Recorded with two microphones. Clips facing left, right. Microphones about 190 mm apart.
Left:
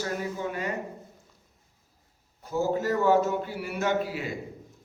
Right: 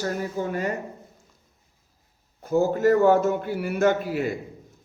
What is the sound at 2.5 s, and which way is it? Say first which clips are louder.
Speech: right 7 dB; 50° right (ahead or behind).